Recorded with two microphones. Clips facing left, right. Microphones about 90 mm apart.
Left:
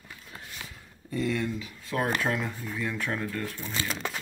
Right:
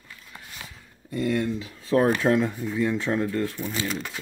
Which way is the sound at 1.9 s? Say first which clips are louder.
Right 9 dB; 35° right (ahead or behind).